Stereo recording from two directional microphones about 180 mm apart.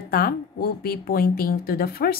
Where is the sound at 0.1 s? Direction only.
55° left (ahead or behind).